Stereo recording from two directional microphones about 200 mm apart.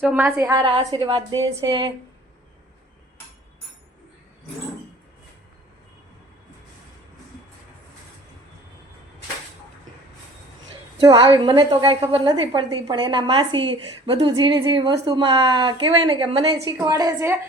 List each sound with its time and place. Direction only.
0.0 s a woman's voice: 10° right (ahead or behind)
0.5 s a woman's voice: 25° right (ahead or behind)
10.9 s a woman's voice: 25° right (ahead or behind)